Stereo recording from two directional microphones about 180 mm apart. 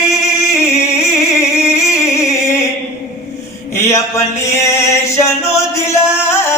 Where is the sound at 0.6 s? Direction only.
15° left (ahead or behind).